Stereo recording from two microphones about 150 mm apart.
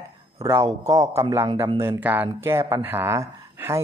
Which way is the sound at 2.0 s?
10° right (ahead or behind).